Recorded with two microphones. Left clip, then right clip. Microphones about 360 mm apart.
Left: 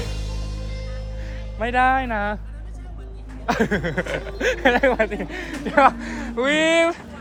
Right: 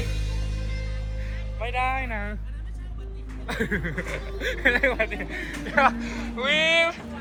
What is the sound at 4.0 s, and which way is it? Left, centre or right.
Music, left.